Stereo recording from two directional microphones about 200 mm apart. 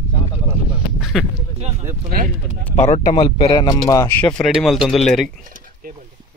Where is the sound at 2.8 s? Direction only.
30° left (ahead or behind).